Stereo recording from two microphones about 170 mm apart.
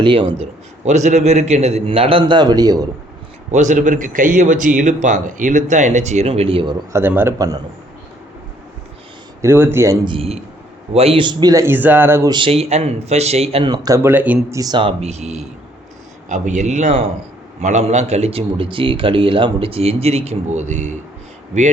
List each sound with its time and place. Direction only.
0.0 s a man's voice: 30° right (ahead or behind)
0.9 s a man's voice: 45° right (ahead or behind); by 2.7 s 25° right (ahead or behind)
3.5 s speech: 45° right (ahead or behind)
6.9 s a man's voice: 15° right (ahead or behind)
9.4 s a man's voice: 15° right (ahead or behind)
12.3 s a man's voice: 30° right (ahead or behind)
13.7 s a man's voice: 20° right (ahead or behind)
14.6 s a man's voice: 25° right (ahead or behind); by 20.9 s 45° right (ahead or behind)